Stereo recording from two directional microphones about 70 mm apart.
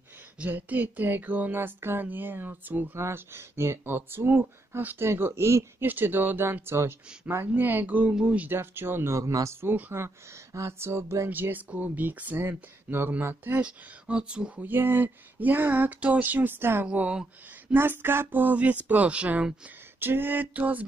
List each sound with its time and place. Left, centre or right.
0.4 s speech: right
3.0 s speech: right
5.9 s speech: right
8.5 s speech: right
9.6 s speech: right
10.0 s speech: right
11.2 s speech: right
14.6 s speech: right
16.8 s speech: centre
17.7 s speech: right
20.0 s speech: right